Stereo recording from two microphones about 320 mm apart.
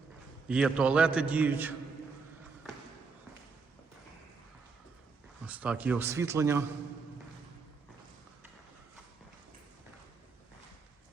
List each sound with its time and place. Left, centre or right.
0.4 s a man's voice: centre
5.5 s speech: centre